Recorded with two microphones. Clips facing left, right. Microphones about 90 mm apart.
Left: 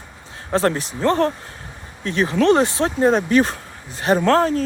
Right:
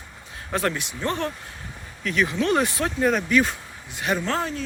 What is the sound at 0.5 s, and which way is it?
Speech, 35° left (ahead or behind).